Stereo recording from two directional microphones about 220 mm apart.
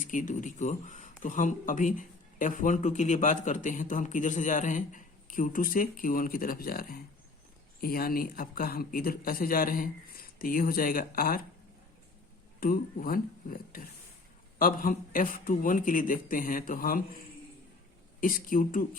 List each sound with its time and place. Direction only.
0.0 s speech: 35° left (ahead or behind)
12.5 s speech: 40° left (ahead or behind)